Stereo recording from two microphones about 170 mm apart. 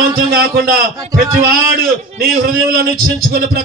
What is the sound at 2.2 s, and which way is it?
A man's voice, 60° right (ahead or behind).